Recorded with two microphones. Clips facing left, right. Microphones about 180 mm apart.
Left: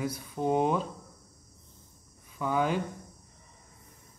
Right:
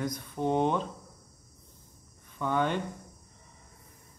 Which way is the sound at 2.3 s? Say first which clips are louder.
Even; 5° left (ahead or behind).